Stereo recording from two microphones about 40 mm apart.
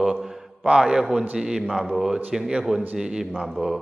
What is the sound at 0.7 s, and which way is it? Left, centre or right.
A man's voice, centre.